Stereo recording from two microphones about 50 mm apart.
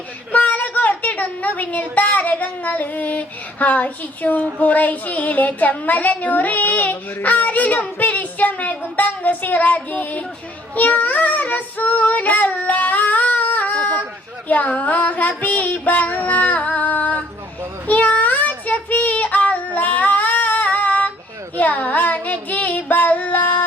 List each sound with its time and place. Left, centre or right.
0.3 s a woman's voice: left
10.8 s child singing: left
14.4 s female singing: left
17.8 s child singing: left